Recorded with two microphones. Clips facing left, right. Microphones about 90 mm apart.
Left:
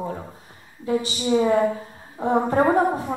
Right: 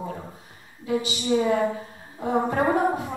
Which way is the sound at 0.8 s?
35° left (ahead or behind).